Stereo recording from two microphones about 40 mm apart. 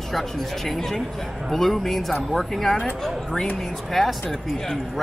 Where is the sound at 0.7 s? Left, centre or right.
Centre.